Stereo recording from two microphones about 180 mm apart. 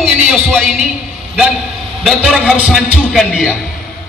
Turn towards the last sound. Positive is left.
turn(degrees=0)  # may be behind; listen again after turning